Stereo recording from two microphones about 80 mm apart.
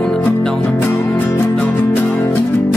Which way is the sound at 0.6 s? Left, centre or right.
Left.